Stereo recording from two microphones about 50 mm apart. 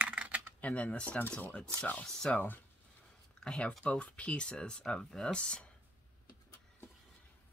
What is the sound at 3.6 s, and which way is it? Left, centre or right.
Speech, left.